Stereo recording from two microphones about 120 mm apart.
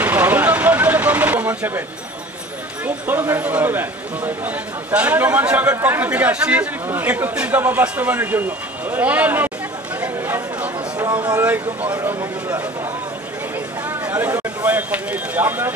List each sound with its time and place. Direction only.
0.0 s vehicle: 15° right (ahead or behind)
2.8 s a man's voice: 15° right (ahead or behind)
9.9 s a sound: 15° right (ahead or behind)
11.4 s a man's voice: 15° right (ahead or behind)
13.8 s speech: 15° right (ahead or behind)